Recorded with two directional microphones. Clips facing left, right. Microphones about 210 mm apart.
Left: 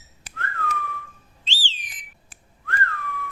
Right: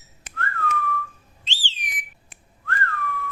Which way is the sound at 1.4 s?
15° right (ahead or behind).